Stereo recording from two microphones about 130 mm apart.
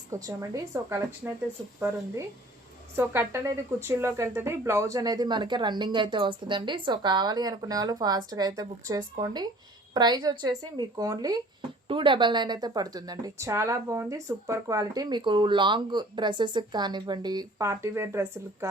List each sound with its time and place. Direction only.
0.1 s a woman's voice: 25° right (ahead or behind)
1.2 s speech: 15° right (ahead or behind)
2.9 s a woman's voice: 15° right (ahead or behind)
11.9 s a woman's voice: 40° right (ahead or behind); by 18.7 s 20° right (ahead or behind)